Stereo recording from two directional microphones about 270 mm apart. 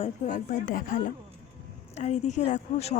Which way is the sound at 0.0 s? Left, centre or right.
Left.